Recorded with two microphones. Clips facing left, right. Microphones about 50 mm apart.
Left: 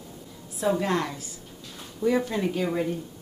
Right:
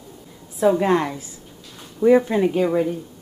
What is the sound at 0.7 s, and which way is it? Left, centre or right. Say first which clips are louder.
A woman's voice: right 7 dB; right.